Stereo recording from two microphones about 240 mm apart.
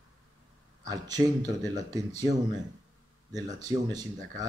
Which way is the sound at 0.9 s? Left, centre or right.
Centre.